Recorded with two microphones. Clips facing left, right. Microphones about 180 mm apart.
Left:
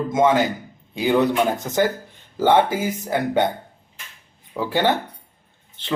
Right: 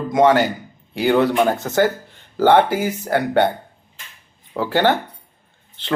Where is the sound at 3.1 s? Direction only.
65° right (ahead or behind).